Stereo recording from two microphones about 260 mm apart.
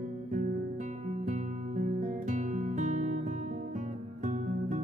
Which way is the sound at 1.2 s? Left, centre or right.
Right.